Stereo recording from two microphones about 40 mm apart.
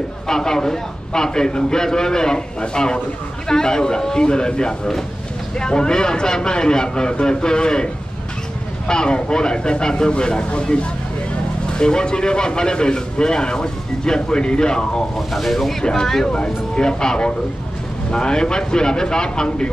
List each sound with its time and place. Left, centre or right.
0.3 s a man's voice: centre
15.1 s a man's voice: centre
16.3 s speech: left